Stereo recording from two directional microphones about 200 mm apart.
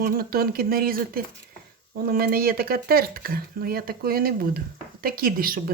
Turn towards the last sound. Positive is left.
turn(degrees=-45)  # may be behind; listen again after turning